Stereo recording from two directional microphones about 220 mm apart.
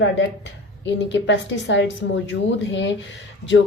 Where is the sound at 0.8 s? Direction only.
55° left (ahead or behind).